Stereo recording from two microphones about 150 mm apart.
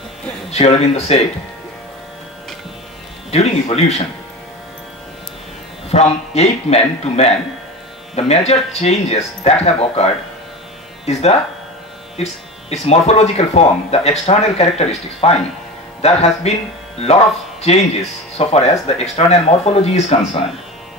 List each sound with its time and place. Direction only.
0.5 s speech: 45° left (ahead or behind)
3.3 s speech: 45° left (ahead or behind)
5.9 s speech: 45° left (ahead or behind)